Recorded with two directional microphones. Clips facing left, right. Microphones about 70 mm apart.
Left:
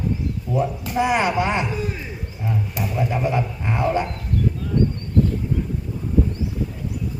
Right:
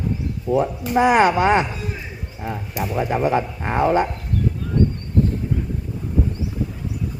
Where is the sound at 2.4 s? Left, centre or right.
Right.